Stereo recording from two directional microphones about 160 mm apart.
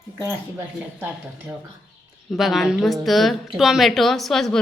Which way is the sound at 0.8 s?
10° right (ahead or behind).